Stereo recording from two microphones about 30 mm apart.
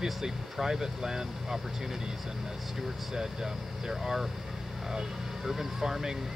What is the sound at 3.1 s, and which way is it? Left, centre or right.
Speech, centre.